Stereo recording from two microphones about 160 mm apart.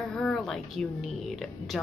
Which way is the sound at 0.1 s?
Centre (ahead or behind).